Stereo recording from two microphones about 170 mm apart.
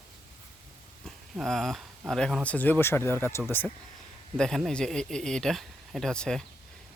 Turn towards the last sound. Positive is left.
turn(degrees=5)  # may be behind; listen again after turning